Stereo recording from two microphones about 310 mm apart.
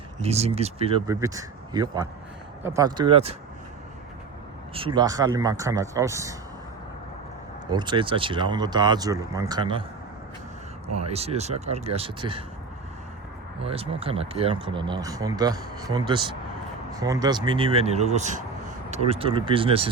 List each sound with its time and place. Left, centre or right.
0.2 s speech: centre
4.7 s speech: centre
7.7 s speech: centre
10.9 s speech: centre
13.7 s speech: centre